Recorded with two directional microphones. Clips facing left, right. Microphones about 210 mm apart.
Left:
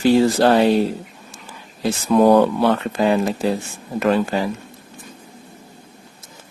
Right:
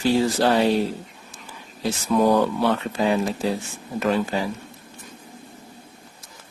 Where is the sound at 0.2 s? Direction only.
60° left (ahead or behind).